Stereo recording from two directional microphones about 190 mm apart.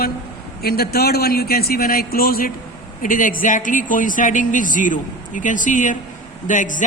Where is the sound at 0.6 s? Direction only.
55° left (ahead or behind).